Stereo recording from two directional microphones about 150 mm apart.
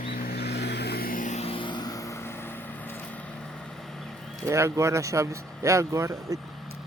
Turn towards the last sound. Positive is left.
turn(degrees=-20)  # may be behind; listen again after turning